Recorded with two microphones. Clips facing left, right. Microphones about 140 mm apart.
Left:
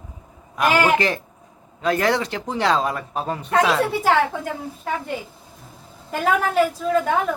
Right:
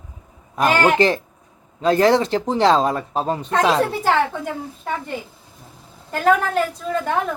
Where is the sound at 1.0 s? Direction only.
30° right (ahead or behind).